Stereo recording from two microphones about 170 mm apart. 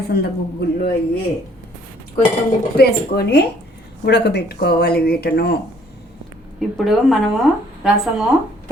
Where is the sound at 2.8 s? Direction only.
70° left (ahead or behind).